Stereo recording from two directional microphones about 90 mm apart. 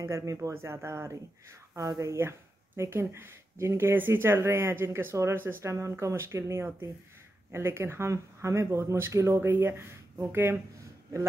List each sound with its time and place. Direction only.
0.0 s speech: 35° right (ahead or behind)